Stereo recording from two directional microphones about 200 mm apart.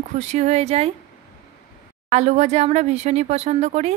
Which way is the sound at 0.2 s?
35° right (ahead or behind).